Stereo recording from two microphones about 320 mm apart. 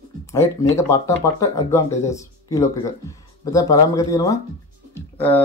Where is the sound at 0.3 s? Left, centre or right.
Centre.